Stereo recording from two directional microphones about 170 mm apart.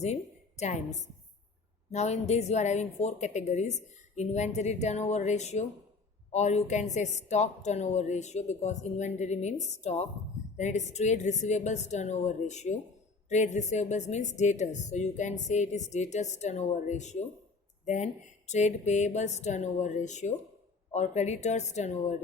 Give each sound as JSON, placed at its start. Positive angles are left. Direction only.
{"t": 0.0, "sound": "a woman's voice", "side_deg": 40}